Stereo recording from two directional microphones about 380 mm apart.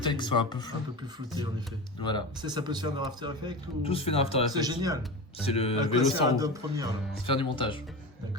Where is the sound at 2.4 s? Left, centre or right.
Centre.